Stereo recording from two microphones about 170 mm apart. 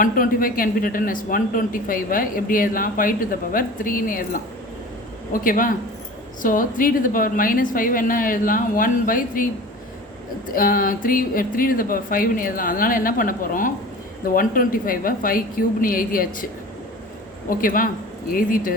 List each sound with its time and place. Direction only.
0.0 s a man's voice: 55° left (ahead or behind)
10.5 s a man's voice: 55° left (ahead or behind)
17.5 s a man's voice: 55° left (ahead or behind)